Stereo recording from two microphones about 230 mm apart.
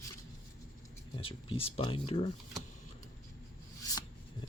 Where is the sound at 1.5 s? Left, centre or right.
Left.